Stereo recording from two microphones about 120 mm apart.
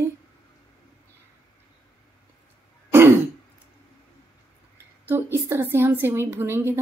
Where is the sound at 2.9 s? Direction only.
20° right (ahead or behind).